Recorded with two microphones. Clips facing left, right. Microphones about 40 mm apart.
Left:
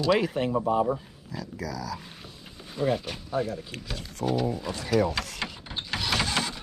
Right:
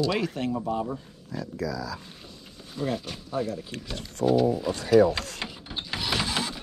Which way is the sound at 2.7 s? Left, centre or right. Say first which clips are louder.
Left 3 dB; centre.